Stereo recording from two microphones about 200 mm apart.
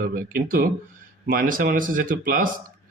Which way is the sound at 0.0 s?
45° right (ahead or behind).